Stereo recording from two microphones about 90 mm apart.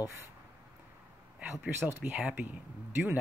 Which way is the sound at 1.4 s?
15° right (ahead or behind).